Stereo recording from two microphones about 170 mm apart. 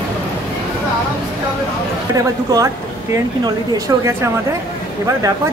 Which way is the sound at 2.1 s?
20° right (ahead or behind).